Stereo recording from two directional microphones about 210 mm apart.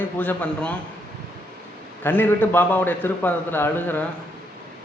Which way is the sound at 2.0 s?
10° left (ahead or behind).